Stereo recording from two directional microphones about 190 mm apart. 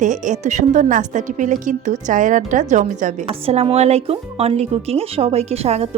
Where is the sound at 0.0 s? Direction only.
40° right (ahead or behind).